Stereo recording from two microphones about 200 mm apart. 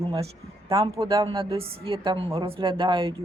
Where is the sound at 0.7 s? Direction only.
25° right (ahead or behind).